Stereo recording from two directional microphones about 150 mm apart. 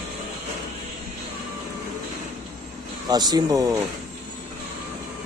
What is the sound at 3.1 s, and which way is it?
Speech, 25° right (ahead or behind).